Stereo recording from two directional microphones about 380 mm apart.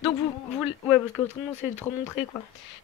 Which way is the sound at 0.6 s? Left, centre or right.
Centre.